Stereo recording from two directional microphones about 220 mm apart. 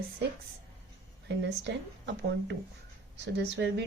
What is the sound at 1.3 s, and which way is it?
A woman's voice, 50° right (ahead or behind).